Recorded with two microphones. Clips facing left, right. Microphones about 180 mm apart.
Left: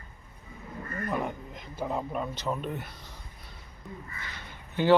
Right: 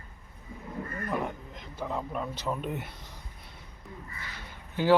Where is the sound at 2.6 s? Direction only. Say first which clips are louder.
Even; 15° right (ahead or behind).